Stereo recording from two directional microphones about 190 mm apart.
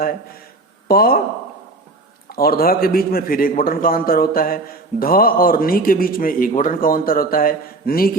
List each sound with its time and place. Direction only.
0.9 s a man's voice: 50° left (ahead or behind)
2.3 s a man's voice: 50° left (ahead or behind)